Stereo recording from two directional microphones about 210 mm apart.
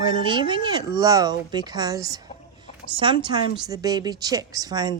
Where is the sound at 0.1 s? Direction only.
25° right (ahead or behind).